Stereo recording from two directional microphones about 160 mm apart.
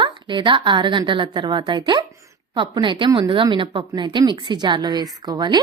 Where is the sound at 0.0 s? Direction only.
30° right (ahead or behind).